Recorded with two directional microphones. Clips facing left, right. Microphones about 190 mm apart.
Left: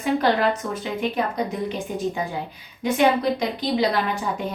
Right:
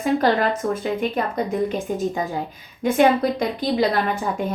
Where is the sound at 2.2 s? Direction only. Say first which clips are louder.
Right 2 dB; 40° right (ahead or behind).